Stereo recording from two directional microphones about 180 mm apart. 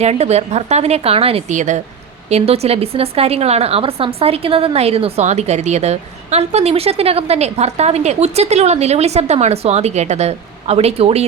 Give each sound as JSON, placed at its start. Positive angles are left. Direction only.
{"t": 0.0, "sound": "a woman's voice", "side_deg": -35}